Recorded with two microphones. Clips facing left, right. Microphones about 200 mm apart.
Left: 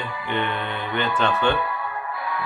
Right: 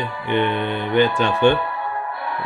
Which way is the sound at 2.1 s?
30° right (ahead or behind).